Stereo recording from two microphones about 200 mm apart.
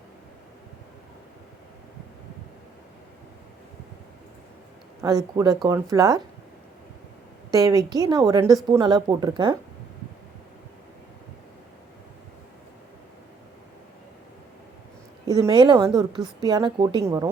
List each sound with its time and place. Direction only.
4.9 s a woman's voice: 15° right (ahead or behind)
7.5 s a woman's voice: 15° right (ahead or behind)
15.3 s a woman's voice: 20° right (ahead or behind)